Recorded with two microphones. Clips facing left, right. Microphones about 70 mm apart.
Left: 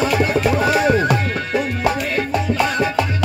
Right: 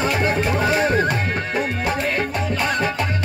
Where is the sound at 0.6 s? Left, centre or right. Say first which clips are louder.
Left 1 dB; right.